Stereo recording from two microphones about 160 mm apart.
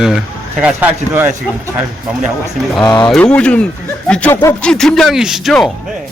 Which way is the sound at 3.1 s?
10° left (ahead or behind).